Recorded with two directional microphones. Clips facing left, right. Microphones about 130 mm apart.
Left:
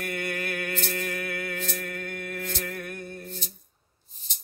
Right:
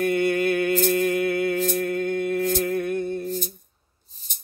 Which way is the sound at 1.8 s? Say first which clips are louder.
Right 12 dB; 25° right (ahead or behind).